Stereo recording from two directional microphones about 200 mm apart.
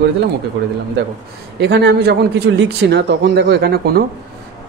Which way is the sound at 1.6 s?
55° right (ahead or behind).